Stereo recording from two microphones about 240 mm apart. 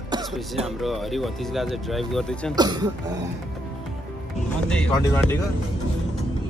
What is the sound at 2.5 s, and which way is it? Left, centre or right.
Speech, centre.